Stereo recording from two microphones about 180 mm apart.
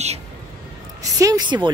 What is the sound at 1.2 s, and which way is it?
Speech, 20° right (ahead or behind).